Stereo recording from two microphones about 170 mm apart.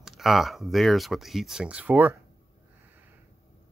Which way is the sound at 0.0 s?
Centre (ahead or behind).